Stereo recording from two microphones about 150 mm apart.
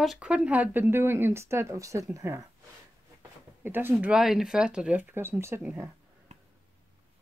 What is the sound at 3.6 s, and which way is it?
Speech, 15° right (ahead or behind).